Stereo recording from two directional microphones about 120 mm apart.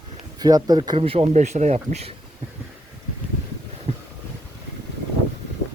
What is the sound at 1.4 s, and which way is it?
Speech, 75° right (ahead or behind).